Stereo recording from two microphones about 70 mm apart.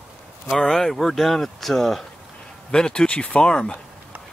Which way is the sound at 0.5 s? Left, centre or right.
Centre.